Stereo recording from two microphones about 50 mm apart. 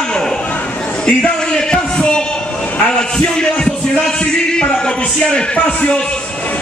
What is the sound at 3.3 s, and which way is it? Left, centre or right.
Music, centre.